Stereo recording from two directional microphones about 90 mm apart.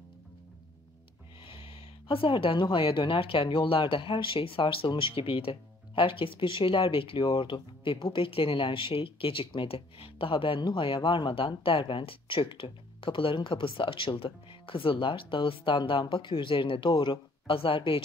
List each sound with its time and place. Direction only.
1.4 s speech: 90° left
16.9 s speech: 60° left (ahead or behind); by 18.0 s 80° left